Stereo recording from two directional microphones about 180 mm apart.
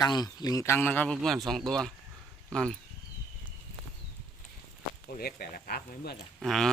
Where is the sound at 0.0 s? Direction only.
20° left (ahead or behind); by 2.7 s 5° left (ahead or behind).